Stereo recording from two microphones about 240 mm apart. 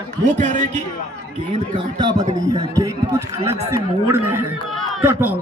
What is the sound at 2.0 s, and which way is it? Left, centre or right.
Speech, centre.